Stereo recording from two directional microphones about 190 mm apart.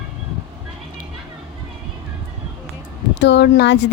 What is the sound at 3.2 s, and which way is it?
Speech, 65° left (ahead or behind).